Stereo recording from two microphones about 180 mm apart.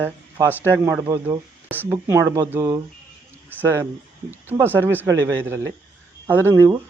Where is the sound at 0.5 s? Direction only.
10° left (ahead or behind).